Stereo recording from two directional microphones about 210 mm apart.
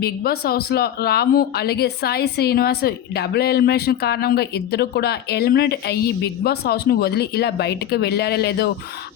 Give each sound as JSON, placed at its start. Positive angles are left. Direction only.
{"t": 0.0, "sound": "speech", "side_deg": 50}